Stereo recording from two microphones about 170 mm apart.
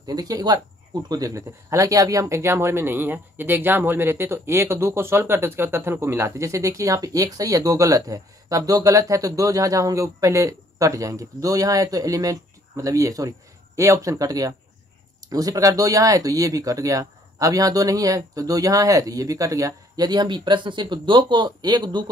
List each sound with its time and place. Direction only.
0.0 s speech: 20° right (ahead or behind)